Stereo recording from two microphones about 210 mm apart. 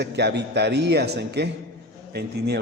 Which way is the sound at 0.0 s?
55° right (ahead or behind).